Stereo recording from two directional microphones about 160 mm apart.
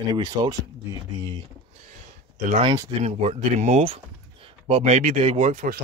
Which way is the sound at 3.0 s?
40° right (ahead or behind).